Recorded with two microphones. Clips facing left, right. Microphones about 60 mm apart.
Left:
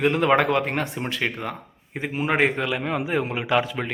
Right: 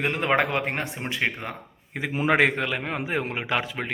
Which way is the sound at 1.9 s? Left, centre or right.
Right.